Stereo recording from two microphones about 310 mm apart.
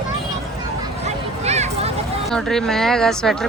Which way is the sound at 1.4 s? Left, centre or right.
Right.